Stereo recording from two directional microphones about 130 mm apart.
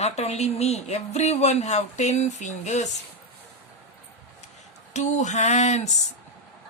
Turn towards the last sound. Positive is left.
turn(degrees=60)  # may be behind; listen again after turning